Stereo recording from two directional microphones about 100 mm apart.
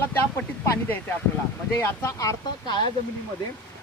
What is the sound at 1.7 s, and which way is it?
Speech, 35° left (ahead or behind).